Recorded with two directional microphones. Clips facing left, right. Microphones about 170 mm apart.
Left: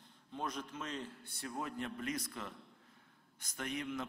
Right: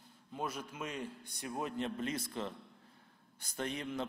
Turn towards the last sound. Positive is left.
turn(degrees=-30)  # may be behind; listen again after turning